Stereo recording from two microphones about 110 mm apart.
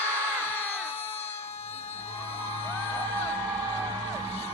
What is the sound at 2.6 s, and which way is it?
Music, 20° left (ahead or behind).